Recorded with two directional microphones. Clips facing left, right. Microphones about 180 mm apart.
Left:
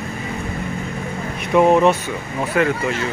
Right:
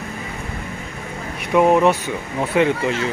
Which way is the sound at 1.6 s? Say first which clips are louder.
Left 1 dB; 10° right (ahead or behind).